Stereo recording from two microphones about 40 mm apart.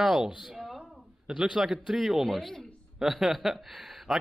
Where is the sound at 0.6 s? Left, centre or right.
Centre.